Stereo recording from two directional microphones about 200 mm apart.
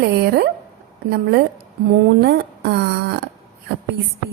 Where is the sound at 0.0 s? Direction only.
55° right (ahead or behind).